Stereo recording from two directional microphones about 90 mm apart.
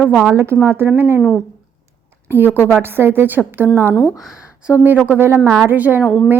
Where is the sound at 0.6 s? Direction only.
25° right (ahead or behind).